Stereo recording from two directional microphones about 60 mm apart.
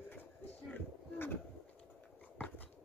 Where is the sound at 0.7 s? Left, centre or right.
Left.